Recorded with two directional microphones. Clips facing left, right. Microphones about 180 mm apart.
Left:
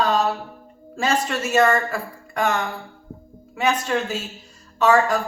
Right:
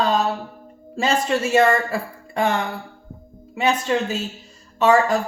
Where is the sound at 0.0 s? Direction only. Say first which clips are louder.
Even; 25° right (ahead or behind).